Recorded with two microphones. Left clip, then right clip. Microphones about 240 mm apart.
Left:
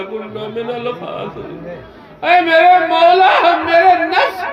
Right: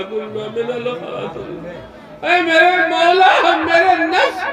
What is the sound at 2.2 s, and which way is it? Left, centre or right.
A man's voice, left.